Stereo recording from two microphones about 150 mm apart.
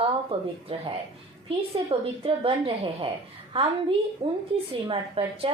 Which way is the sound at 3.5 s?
35° right (ahead or behind).